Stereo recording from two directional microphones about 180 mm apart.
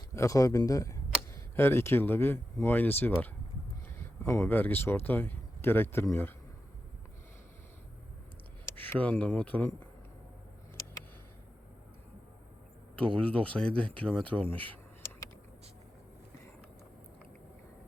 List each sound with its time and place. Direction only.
0.1 s speech: 15° left (ahead or behind)
8.7 s speech: 10° left (ahead or behind)
13.1 s speech: 5° left (ahead or behind)